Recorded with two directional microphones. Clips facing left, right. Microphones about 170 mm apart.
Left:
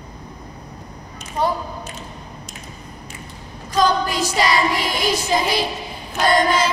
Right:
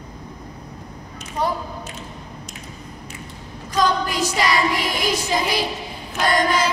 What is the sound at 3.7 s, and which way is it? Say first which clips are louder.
Child singing: left 2 dB; 30° left (ahead or behind).